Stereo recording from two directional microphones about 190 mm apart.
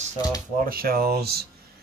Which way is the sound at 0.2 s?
20° left (ahead or behind).